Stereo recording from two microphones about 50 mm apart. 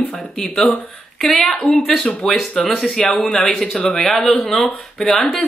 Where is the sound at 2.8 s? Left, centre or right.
Centre.